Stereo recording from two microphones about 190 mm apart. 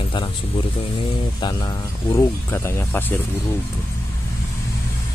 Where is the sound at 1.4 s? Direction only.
20° left (ahead or behind).